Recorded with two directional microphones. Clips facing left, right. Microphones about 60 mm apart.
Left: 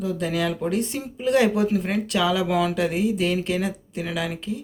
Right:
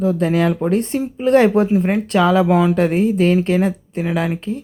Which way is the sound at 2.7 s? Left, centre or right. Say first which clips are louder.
Right 7 dB; right.